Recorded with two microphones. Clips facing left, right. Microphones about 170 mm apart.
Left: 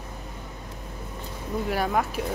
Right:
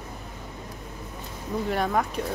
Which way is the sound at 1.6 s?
5° left (ahead or behind).